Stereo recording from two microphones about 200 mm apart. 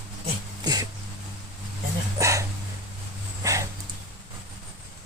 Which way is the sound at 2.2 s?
15° right (ahead or behind).